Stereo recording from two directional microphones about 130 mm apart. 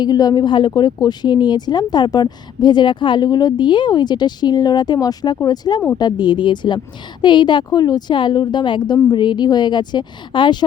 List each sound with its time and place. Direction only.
0.0 s speech: 30° left (ahead or behind)